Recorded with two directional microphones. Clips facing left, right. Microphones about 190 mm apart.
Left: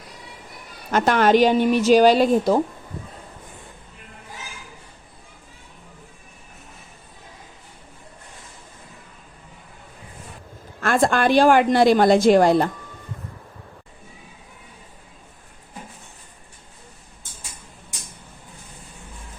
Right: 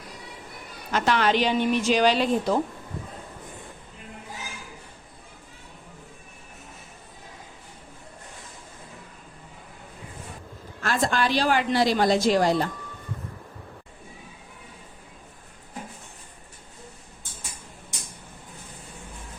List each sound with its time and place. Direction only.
0.9 s a woman's voice: 50° left (ahead or behind)
10.8 s a woman's voice: 55° left (ahead or behind)